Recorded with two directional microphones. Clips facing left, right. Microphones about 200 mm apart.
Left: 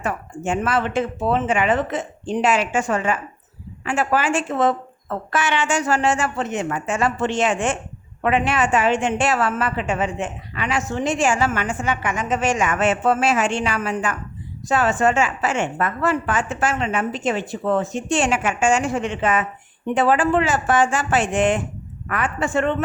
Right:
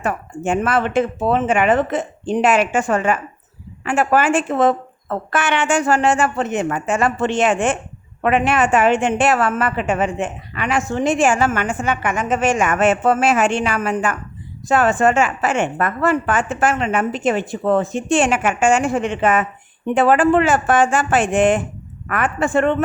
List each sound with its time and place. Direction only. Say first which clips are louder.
0.0 s a woman's voice: right 3 dB; 55° right (ahead or behind)